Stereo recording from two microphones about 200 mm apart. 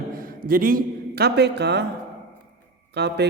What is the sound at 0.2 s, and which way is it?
A man's voice, 45° right (ahead or behind).